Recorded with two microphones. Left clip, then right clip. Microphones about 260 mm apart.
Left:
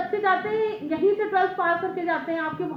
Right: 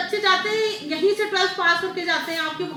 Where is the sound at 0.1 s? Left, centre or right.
Right.